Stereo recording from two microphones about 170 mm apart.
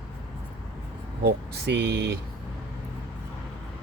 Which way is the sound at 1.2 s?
75° right (ahead or behind).